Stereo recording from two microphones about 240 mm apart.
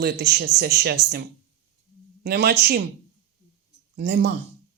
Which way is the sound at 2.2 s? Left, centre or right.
Right.